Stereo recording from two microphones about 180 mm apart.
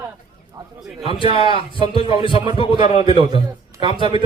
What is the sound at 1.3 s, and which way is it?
A man's voice, 30° left (ahead or behind).